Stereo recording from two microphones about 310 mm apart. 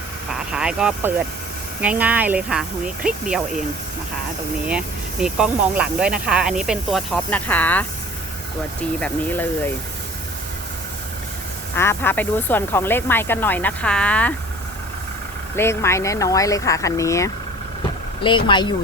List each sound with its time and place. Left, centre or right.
0.5 s speech: centre
5.2 s speech: centre
9.0 s speech: centre
11.7 s speech: centre
15.5 s speech: centre